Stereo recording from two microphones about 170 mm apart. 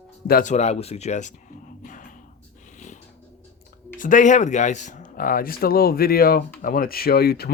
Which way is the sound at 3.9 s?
50° left (ahead or behind).